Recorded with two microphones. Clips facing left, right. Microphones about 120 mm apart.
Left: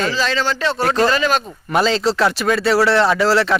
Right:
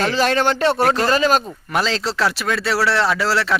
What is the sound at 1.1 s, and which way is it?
Speech, 40° right (ahead or behind).